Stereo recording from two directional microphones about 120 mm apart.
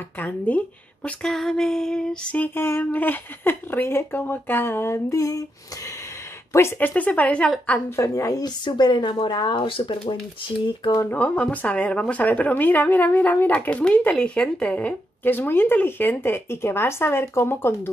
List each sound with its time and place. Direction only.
0.2 s speech: 10° left (ahead or behind); by 5.4 s 30° left (ahead or behind)
6.5 s a woman's voice: 20° left (ahead or behind); by 10.1 s 45° left (ahead or behind)
11.0 s speech: 15° left (ahead or behind)